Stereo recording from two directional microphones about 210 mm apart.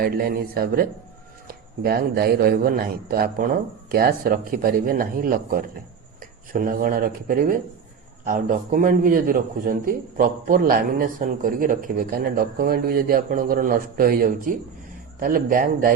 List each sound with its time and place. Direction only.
0.0 s a man's voice: 45° right (ahead or behind)